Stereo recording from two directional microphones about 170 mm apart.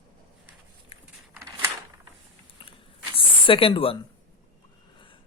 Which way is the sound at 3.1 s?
30° left (ahead or behind).